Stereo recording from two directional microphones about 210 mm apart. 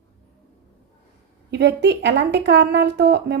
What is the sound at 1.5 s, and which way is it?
A woman's voice, 55° right (ahead or behind).